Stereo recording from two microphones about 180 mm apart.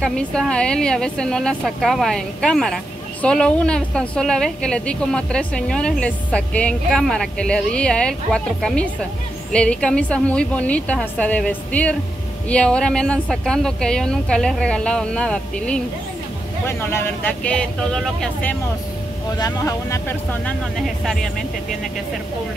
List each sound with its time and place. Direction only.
0.0 s a woman's voice: 5° left (ahead or behind)
19.3 s speech: 20° left (ahead or behind)
20.4 s a woman's voice: centre (ahead or behind)